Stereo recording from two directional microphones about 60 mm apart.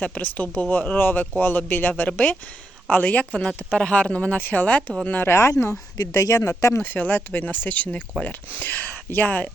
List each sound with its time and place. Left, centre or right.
0.0 s speech: left
3.3 s speech: centre
5.2 s speech: left
6.0 s speech: left
6.9 s speech: left